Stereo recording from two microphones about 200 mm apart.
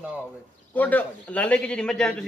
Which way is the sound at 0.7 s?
10° left (ahead or behind).